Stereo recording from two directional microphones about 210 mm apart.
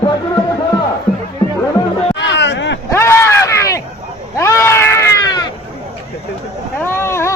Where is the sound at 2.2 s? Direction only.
60° left (ahead or behind).